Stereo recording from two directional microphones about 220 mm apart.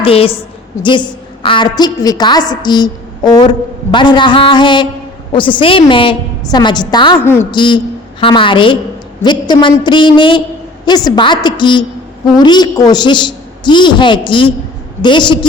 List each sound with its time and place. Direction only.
0.0 s a woman's voice: 25° left (ahead or behind); by 7.4 s 10° left (ahead or behind)
7.5 s a woman's voice: 20° left (ahead or behind)